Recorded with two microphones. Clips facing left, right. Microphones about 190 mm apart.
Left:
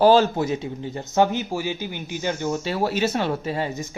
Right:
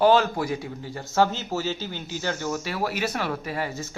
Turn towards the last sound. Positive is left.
turn(degrees=20)  # may be behind; listen again after turning